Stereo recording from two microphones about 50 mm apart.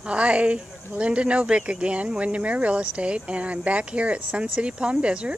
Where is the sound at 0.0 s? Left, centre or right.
Right.